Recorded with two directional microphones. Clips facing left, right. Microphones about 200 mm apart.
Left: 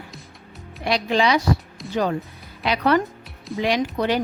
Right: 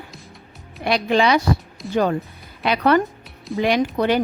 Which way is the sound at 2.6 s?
55° right (ahead or behind).